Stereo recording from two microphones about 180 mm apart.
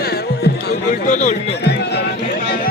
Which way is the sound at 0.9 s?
40° left (ahead or behind).